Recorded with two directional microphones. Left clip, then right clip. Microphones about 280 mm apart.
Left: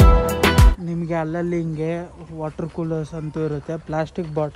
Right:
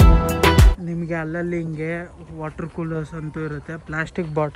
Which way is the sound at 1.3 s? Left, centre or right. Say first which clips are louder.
Left 2 dB; centre.